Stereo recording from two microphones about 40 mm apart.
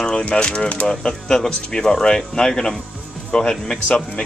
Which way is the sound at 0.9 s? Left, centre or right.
Centre.